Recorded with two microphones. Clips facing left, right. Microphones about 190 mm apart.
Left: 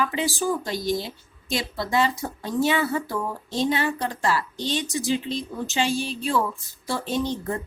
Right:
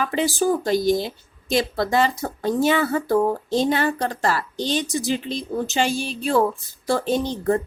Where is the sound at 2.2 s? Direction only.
45° right (ahead or behind).